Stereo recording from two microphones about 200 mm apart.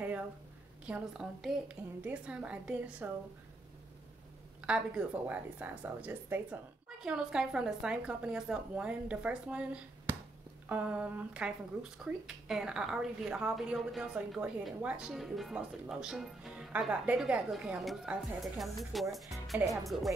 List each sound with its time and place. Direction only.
0.8 s a woman's voice: 5° right (ahead or behind)
4.6 s a woman's voice: 5° right (ahead or behind)